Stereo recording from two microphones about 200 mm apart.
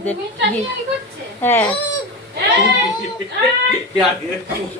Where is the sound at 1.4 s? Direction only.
10° left (ahead or behind).